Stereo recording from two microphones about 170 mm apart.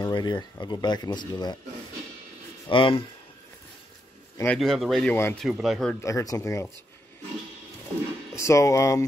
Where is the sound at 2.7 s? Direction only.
30° left (ahead or behind).